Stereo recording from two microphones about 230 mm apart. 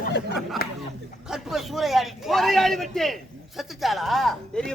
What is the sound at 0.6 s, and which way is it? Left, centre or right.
Speech, left.